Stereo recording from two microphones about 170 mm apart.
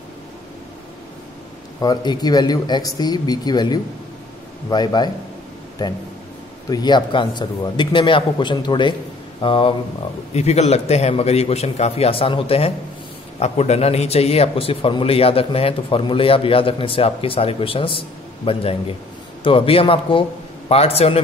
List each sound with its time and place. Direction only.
1.8 s a man's voice: 25° left (ahead or behind)
6.7 s a man's voice: 25° left (ahead or behind)